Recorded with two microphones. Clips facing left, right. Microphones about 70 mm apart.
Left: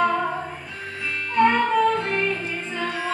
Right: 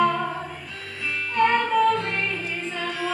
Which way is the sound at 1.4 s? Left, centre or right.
Centre.